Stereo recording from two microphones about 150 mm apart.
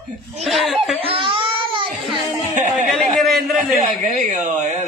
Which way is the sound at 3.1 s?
Centre (ahead or behind).